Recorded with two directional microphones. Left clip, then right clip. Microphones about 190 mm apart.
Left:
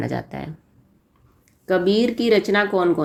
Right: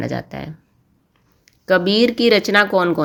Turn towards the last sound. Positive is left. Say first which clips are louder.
# right 4 dB
turn(degrees=-25)  # may be behind; listen again after turning